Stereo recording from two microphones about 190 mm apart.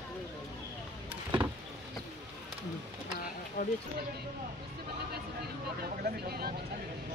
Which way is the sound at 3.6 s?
45° left (ahead or behind).